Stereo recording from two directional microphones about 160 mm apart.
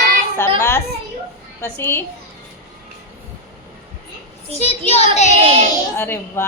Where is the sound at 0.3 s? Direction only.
15° left (ahead or behind).